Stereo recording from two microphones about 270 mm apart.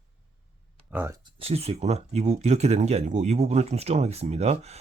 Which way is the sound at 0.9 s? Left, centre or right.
Centre.